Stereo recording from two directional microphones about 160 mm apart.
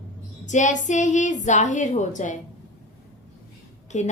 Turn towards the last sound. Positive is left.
turn(degrees=45)  # may be behind; listen again after turning